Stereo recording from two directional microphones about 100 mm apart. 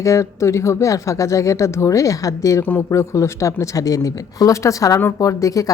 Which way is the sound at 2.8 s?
30° left (ahead or behind).